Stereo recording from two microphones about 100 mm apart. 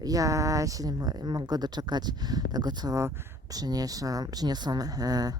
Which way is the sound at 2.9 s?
25° right (ahead or behind).